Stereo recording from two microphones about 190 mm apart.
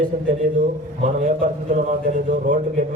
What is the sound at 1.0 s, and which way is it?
A man's voice, 40° right (ahead or behind).